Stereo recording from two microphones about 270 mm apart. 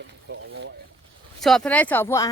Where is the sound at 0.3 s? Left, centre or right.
Right.